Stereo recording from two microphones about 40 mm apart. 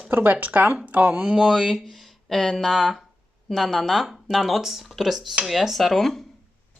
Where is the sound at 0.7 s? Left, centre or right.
Right.